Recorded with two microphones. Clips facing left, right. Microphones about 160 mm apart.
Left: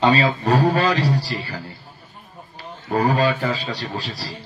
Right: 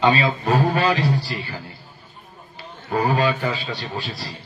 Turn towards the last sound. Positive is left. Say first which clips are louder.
# left 1 dB
turn(degrees=40)  # may be behind; listen again after turning